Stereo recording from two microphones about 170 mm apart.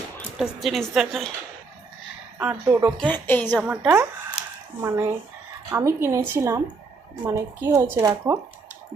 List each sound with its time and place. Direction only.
0.3 s a woman's voice: centre (ahead or behind)
2.4 s a woman's voice: 10° right (ahead or behind)
3.0 s a woman's voice: 10° left (ahead or behind)
3.5 s a woman's voice: 10° right (ahead or behind)